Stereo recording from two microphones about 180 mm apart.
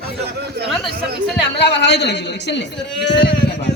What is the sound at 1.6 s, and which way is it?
A man's voice, 75° left (ahead or behind).